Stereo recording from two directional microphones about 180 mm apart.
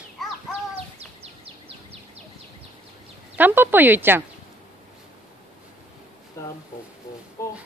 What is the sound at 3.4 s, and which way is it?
Speech, 10° right (ahead or behind).